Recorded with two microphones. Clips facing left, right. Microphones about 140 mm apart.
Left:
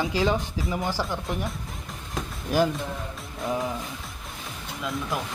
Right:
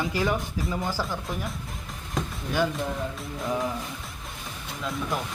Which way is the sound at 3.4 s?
Centre (ahead or behind).